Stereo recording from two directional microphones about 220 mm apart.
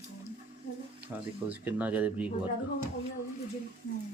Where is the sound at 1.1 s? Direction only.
5° right (ahead or behind).